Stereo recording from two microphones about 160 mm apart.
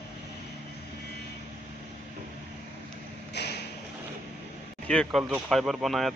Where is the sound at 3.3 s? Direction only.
90° left.